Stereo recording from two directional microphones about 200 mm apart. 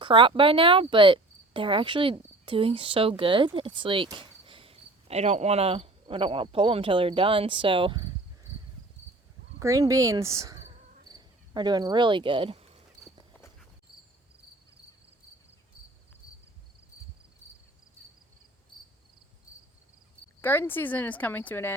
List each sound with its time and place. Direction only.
0.0 s speech: 25° right (ahead or behind)
9.6 s speech: 15° right (ahead or behind)
20.4 s speech: 10° left (ahead or behind)